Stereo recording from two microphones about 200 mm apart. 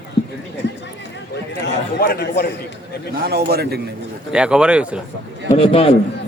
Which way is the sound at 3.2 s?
55° right (ahead or behind).